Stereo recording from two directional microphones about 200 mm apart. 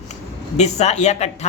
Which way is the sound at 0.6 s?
35° left (ahead or behind).